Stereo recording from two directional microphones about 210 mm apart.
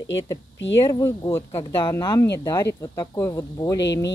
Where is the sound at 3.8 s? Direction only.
55° left (ahead or behind).